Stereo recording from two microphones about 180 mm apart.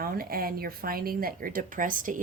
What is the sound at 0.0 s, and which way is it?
Speech, 55° right (ahead or behind).